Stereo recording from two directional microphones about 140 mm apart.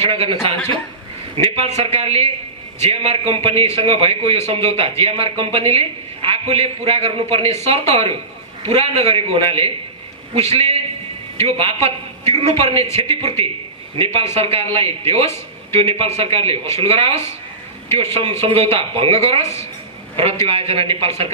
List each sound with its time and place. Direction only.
0.0 s a man's voice: 45° right (ahead or behind)
16.6 s speech: 20° left (ahead or behind)
17.9 s a man's voice: 45° right (ahead or behind)
20.4 s a man's voice: 45° right (ahead or behind)